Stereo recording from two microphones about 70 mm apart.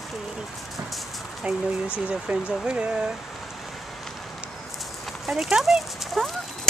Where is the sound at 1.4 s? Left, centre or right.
Centre.